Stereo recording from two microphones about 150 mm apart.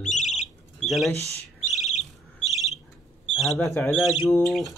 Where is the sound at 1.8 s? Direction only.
50° left (ahead or behind).